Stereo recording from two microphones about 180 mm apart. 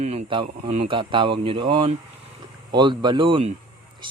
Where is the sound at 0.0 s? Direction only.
35° right (ahead or behind).